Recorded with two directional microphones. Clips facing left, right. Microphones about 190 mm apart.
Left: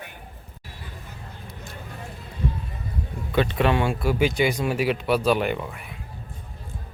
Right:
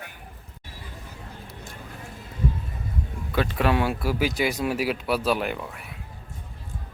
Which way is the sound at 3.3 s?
Centre (ahead or behind).